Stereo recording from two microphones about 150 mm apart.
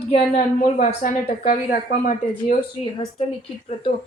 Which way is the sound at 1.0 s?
70° left (ahead or behind).